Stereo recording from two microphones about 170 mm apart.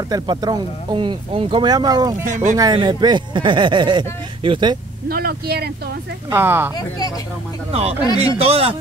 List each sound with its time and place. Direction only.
0.1 s speech: 25° right (ahead or behind)
2.2 s speech: 45° right (ahead or behind)
2.5 s speech: 25° right (ahead or behind)
5.0 s speech: 65° right (ahead or behind)
6.3 s speech: 15° right (ahead or behind)
8.2 s speech: 35° right (ahead or behind)